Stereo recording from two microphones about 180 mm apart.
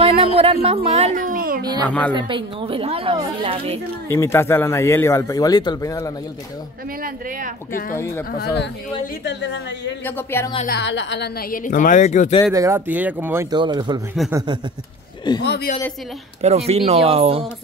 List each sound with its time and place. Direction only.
0.0 s a woman's voice: 30° right (ahead or behind); by 1.7 s 50° right (ahead or behind)
1.9 s a man's voice: 5° left (ahead or behind)
2.1 s a woman's voice: 25° right (ahead or behind)
4.1 s a man's voice: 15° left (ahead or behind)
7.0 s speech: 50° right (ahead or behind)
8.4 s a woman's voice: 70° left (ahead or behind)
10.0 s a man's voice: 10° left (ahead or behind)
10.7 s speech: 75° left (ahead or behind); by 12.4 s 40° left (ahead or behind)
12.5 s speech: 15° right (ahead or behind)
13.6 s speech: 25° right (ahead or behind)
15.4 s a woman's voice: 65° left (ahead or behind)
16.3 s a woman's voice: 35° right (ahead or behind)